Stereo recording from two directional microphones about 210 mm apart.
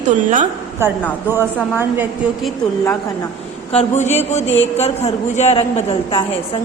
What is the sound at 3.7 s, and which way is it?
A man's voice, 30° left (ahead or behind).